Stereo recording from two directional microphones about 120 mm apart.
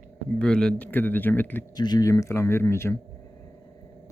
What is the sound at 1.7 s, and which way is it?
Speech, 35° left (ahead or behind).